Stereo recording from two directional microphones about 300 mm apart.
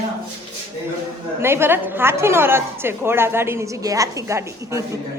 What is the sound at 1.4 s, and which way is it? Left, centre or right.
A woman's voice, centre.